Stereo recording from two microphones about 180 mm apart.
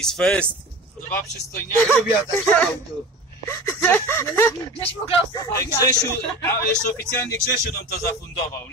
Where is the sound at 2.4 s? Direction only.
5° left (ahead or behind).